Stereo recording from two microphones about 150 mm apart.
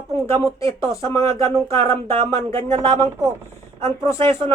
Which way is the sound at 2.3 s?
20° left (ahead or behind).